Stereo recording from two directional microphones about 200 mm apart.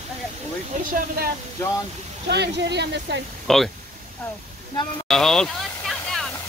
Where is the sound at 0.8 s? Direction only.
45° right (ahead or behind).